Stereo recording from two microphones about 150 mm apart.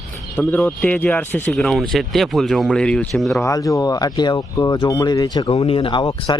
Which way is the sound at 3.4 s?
20° left (ahead or behind).